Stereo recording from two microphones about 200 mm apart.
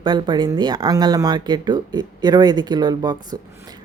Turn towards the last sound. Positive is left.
turn(degrees=-20)  # may be behind; listen again after turning